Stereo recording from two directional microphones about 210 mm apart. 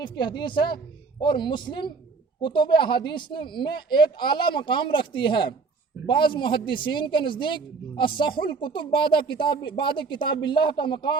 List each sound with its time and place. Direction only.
0.0 s speech: 20° left (ahead or behind)